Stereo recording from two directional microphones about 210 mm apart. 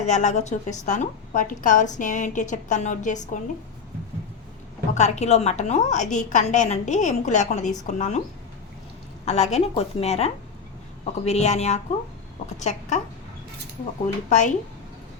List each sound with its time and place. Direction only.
0.0 s a woman's voice: 35° left (ahead or behind)
4.9 s a woman's voice: 35° left (ahead or behind)
9.2 s a woman's voice: 30° left (ahead or behind)
14.3 s a woman's voice: 35° left (ahead or behind)